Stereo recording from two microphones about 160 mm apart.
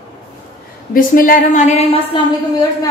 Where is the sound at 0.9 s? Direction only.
60° left (ahead or behind); by 2.0 s 45° left (ahead or behind).